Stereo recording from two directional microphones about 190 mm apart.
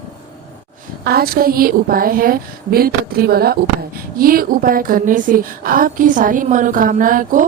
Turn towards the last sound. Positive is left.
turn(degrees=-45)  # may be behind; listen again after turning